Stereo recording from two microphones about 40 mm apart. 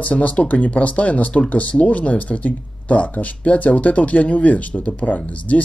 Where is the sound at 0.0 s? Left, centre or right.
Left.